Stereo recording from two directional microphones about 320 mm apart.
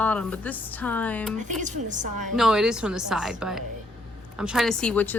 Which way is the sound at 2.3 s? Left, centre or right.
Centre.